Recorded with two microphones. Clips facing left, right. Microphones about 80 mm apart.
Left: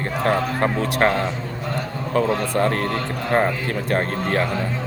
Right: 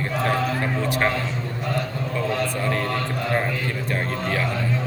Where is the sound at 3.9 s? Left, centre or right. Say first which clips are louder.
Left 5 dB; left.